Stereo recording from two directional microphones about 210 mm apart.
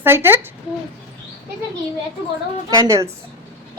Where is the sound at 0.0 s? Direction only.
10° right (ahead or behind).